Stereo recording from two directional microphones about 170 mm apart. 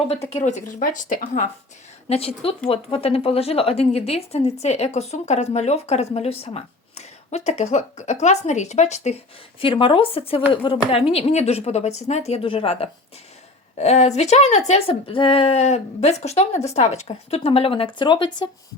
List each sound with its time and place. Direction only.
0.1 s speech: 40° left (ahead or behind)
2.0 s a woman's voice: 35° left (ahead or behind)
9.6 s a woman's voice: 30° left (ahead or behind)